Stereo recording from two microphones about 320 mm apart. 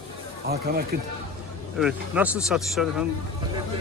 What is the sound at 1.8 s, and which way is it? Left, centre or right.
Speech, centre.